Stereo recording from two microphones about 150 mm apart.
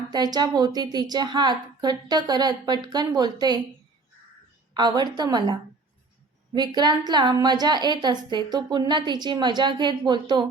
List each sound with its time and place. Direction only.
0.1 s a woman's voice: 25° right (ahead or behind)
4.7 s a woman's voice: 30° right (ahead or behind)